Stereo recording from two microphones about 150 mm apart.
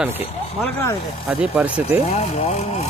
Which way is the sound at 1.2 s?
10° right (ahead or behind).